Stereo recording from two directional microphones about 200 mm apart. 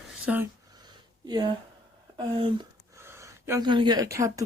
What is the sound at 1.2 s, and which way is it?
Speech, 20° right (ahead or behind).